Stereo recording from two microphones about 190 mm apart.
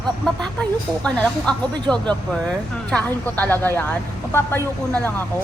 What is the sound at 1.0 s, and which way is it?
Speech, 5° left (ahead or behind).